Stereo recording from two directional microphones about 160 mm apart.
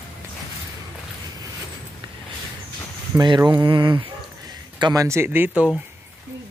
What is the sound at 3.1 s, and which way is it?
Speech, 25° right (ahead or behind).